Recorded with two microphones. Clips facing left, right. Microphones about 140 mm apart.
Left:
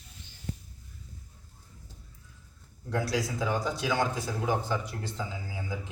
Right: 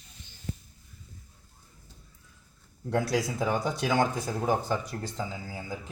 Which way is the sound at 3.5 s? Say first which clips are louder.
Right 3 dB; 50° right (ahead or behind).